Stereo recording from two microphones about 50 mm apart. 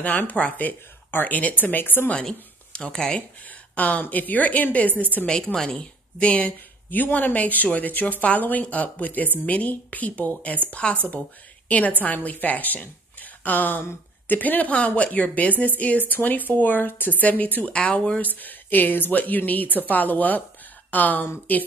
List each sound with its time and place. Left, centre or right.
0.0 s a woman's voice: left
2.1 s speech: centre
3.7 s a woman's voice: left
5.2 s a woman's voice: centre
12.0 s a woman's voice: left
17.7 s a woman's voice: left